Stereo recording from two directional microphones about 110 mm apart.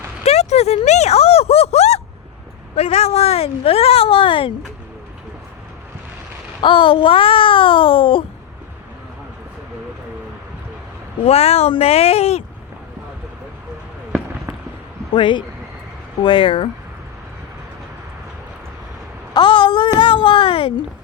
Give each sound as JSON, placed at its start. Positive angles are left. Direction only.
{"t": 0.3, "sound": "a sound", "side_deg": 75}
{"t": 2.7, "sound": "speech", "side_deg": 70}
{"t": 6.6, "sound": "a child's voice", "side_deg": 50}
{"t": 11.2, "sound": "speech", "side_deg": 70}
{"t": 15.1, "sound": "a child's voice", "side_deg": 45}
{"t": 19.3, "sound": "a sound", "side_deg": 45}
{"t": 20.0, "sound": "speech", "side_deg": 50}